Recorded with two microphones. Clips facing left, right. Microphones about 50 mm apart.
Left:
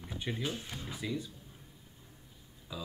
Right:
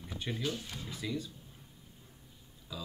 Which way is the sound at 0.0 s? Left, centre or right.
Left.